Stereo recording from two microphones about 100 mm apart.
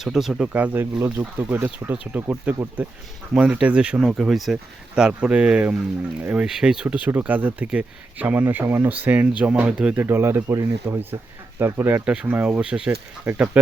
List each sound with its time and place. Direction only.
0.0 s speech: 5° right (ahead or behind)
6.8 s speech: 15° right (ahead or behind)
12.0 s speech: 10° right (ahead or behind)